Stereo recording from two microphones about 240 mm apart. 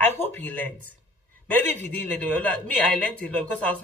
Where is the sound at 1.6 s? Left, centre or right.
Right.